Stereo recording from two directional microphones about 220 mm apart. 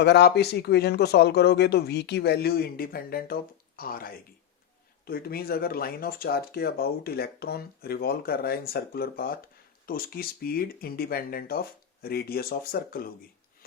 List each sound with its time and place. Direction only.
0.0 s speech: 50° left (ahead or behind)